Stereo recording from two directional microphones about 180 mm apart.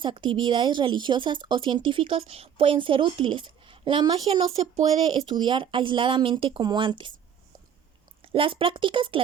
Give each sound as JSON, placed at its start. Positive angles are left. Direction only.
{"t": 0.0, "sound": "speech", "side_deg": -25}
{"t": 8.2, "sound": "speech", "side_deg": -30}